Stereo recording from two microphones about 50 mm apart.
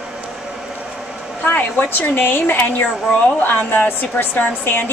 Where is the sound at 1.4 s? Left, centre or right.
Left.